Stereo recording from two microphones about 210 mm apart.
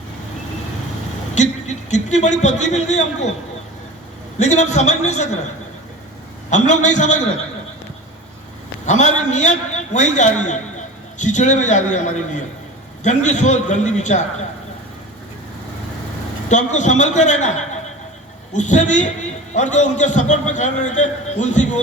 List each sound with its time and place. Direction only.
1.4 s a man's voice: 35° left (ahead or behind)
4.4 s a man's voice: 35° left (ahead or behind)
6.5 s a man's voice: 35° left (ahead or behind)
8.9 s a man's voice: 35° left (ahead or behind)
16.5 s a man's voice: 35° left (ahead or behind)